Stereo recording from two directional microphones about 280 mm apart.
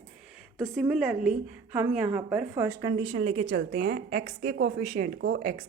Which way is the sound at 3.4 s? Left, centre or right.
Right.